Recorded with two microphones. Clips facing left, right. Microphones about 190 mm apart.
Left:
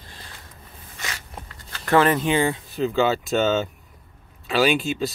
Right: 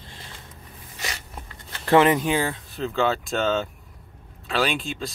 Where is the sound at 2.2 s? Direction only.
5° right (ahead or behind).